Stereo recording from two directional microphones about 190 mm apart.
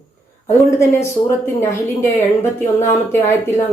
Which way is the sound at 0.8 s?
15° left (ahead or behind).